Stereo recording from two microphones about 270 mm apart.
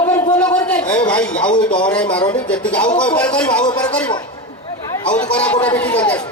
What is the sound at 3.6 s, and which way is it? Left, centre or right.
Speech, centre.